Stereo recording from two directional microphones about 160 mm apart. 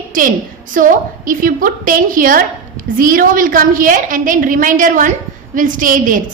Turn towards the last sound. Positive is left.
turn(degrees=-55)  # may be behind; listen again after turning